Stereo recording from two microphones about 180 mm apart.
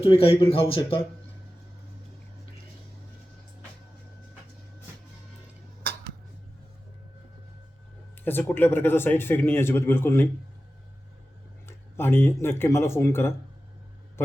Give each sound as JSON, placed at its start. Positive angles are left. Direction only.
{"t": 0.0, "sound": "speech", "side_deg": 30}
{"t": 8.2, "sound": "speech", "side_deg": 10}
{"t": 11.9, "sound": "speech", "side_deg": 15}